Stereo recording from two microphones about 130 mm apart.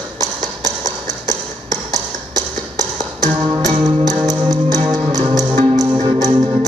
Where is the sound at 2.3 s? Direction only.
30° right (ahead or behind).